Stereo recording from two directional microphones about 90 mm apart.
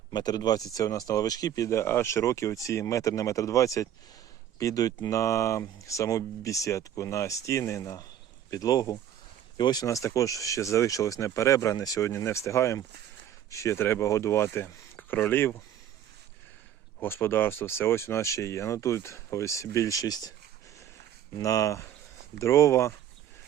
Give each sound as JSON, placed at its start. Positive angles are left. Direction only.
{"t": 0.1, "sound": "speech", "side_deg": 50}
{"t": 9.8, "sound": "speech", "side_deg": 35}
{"t": 17.0, "sound": "speech", "side_deg": 25}
{"t": 21.3, "sound": "speech", "side_deg": 40}